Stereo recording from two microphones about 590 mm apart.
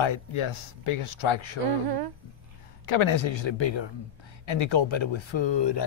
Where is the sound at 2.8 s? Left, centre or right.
Left.